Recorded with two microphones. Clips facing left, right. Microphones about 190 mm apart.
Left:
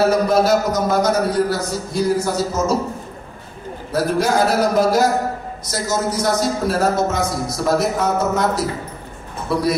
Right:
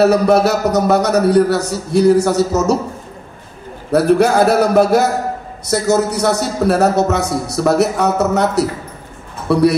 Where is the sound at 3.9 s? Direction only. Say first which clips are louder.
Right 7 dB; 65° right (ahead or behind).